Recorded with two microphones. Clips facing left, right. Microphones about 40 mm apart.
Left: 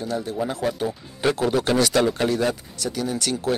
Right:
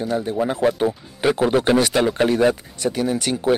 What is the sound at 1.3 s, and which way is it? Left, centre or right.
Speech, right.